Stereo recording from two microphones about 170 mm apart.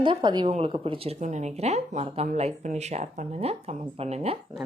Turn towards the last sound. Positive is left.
turn(degrees=-35)  # may be behind; listen again after turning